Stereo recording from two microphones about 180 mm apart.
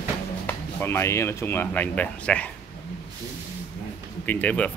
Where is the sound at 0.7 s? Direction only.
15° left (ahead or behind).